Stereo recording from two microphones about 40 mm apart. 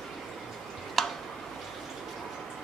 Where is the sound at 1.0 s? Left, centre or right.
Centre.